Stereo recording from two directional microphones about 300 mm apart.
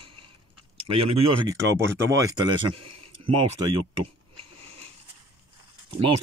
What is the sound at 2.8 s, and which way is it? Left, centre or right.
Speech, right.